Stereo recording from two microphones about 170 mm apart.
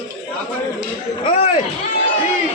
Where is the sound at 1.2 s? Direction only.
35° left (ahead or behind).